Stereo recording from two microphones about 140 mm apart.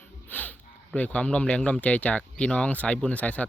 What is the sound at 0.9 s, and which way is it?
Speech, 10° left (ahead or behind).